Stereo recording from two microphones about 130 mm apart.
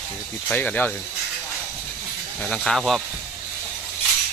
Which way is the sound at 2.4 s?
5° left (ahead or behind).